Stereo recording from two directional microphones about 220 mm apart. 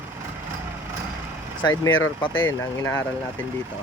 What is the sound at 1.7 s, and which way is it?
Speech, 10° left (ahead or behind).